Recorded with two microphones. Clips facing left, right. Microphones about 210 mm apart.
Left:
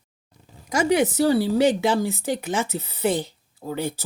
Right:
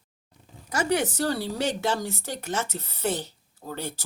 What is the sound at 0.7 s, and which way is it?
Speech, 10° left (ahead or behind).